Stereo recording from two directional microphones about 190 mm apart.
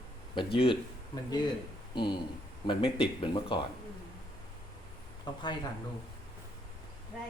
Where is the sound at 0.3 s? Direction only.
25° left (ahead or behind).